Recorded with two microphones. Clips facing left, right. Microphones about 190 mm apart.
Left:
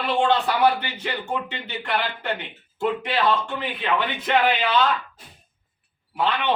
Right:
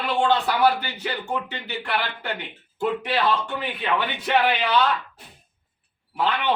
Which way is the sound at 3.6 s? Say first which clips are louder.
Left 1 dB; 5° right (ahead or behind).